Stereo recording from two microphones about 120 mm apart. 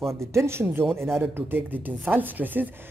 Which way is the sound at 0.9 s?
5° left (ahead or behind).